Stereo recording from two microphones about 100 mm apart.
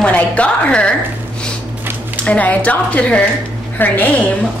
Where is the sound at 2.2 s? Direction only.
15° left (ahead or behind).